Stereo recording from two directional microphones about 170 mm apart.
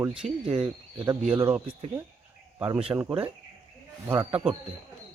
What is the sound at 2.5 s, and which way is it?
Speech, 15° right (ahead or behind).